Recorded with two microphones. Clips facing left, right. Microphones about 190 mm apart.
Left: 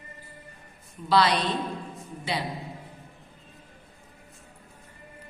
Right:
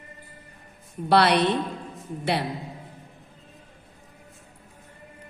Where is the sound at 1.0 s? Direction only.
65° right (ahead or behind).